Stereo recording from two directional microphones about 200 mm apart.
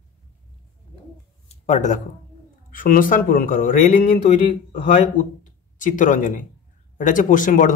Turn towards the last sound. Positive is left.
turn(degrees=40)  # may be behind; listen again after turning